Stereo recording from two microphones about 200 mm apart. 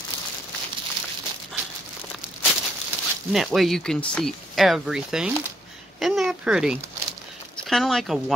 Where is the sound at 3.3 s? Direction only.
Centre (ahead or behind).